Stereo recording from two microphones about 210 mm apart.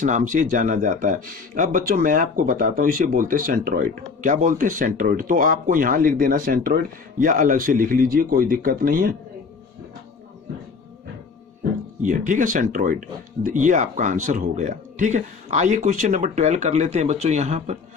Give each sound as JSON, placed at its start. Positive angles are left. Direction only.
{"t": 0.0, "sound": "speech", "side_deg": -35}
{"t": 12.0, "sound": "speech", "side_deg": -35}